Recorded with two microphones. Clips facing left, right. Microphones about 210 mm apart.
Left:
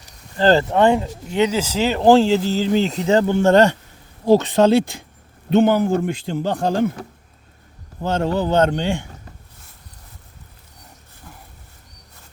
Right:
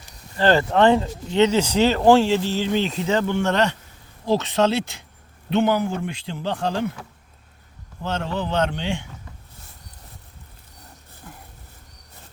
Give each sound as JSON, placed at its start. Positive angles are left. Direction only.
{"t": 0.3, "sound": "speech", "side_deg": 35}
{"t": 0.7, "sound": "speech", "side_deg": 15}
{"t": 2.0, "sound": "speech", "side_deg": 35}
{"t": 4.3, "sound": "a man's voice", "side_deg": 50}
{"t": 8.2, "sound": "a man's voice", "side_deg": 40}